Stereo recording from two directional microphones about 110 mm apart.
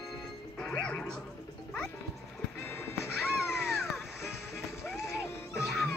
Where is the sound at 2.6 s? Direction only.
20° left (ahead or behind).